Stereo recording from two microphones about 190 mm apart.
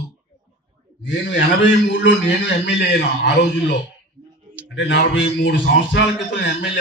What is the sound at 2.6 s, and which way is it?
Speech, 70° left (ahead or behind).